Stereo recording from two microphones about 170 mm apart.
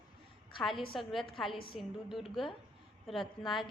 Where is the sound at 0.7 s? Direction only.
30° left (ahead or behind).